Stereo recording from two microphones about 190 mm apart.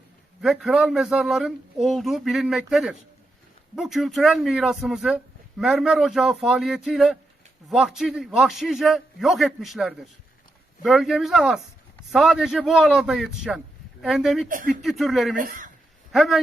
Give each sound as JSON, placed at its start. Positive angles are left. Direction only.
{"t": 0.4, "sound": "speech", "side_deg": -5}
{"t": 14.4, "sound": "speech", "side_deg": -45}
{"t": 14.7, "sound": "speech", "side_deg": 0}
{"t": 15.4, "sound": "speech", "side_deg": -45}
{"t": 16.1, "sound": "speech", "side_deg": 0}